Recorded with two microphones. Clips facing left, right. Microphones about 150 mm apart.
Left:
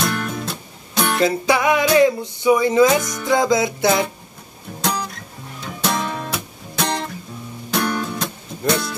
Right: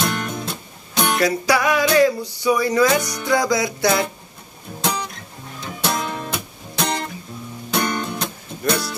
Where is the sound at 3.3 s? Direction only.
20° left (ahead or behind).